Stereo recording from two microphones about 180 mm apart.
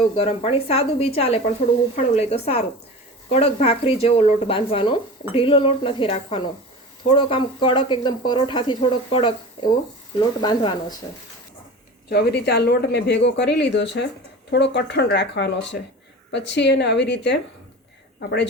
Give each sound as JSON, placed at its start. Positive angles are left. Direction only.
{"t": 0.2, "sound": "speech", "side_deg": 35}
{"t": 12.0, "sound": "speech", "side_deg": 65}